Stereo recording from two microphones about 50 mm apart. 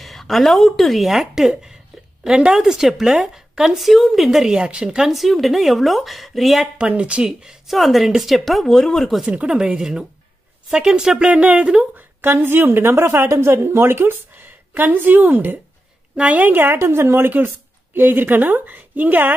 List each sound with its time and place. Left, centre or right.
0.0 s a woman's voice: centre
3.7 s a woman's voice: centre
5.1 s a woman's voice: centre
6.9 s speech: right
7.2 s a woman's voice: centre
9.3 s speech: centre
11.3 s speech: right
11.9 s a woman's voice: right
13.0 s a woman's voice: right
14.7 s a woman's voice: right
16.7 s a woman's voice: right